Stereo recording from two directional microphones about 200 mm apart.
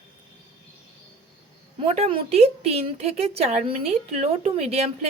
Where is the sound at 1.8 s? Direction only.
30° right (ahead or behind).